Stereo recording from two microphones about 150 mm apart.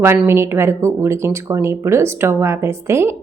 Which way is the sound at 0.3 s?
15° right (ahead or behind).